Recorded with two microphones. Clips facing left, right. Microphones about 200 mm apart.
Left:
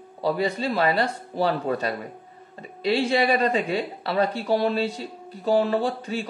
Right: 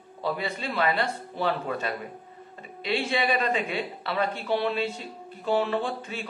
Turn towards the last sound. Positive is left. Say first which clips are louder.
# left 5 dB
turn(degrees=40)  # may be behind; listen again after turning